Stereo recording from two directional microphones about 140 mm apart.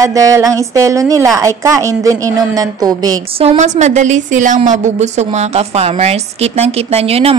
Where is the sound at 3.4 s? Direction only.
55° right (ahead or behind).